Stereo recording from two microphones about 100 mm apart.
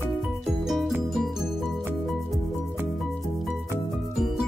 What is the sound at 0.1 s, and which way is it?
Music, centre (ahead or behind).